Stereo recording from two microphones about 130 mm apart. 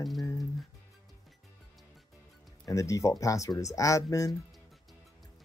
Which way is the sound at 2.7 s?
25° left (ahead or behind).